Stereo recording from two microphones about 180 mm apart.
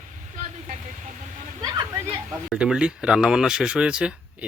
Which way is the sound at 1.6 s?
20° right (ahead or behind).